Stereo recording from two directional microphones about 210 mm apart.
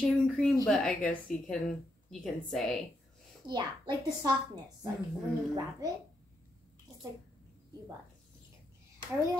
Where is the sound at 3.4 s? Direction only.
20° right (ahead or behind).